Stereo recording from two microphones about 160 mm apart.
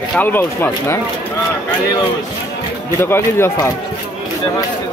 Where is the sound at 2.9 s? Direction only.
15° left (ahead or behind).